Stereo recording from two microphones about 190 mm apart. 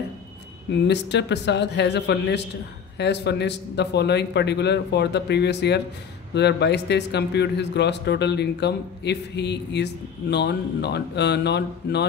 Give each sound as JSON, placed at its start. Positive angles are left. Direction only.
{"t": 0.8, "sound": "a man's voice", "side_deg": 65}